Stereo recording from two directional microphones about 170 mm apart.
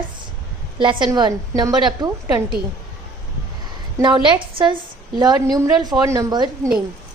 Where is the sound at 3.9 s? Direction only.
25° right (ahead or behind).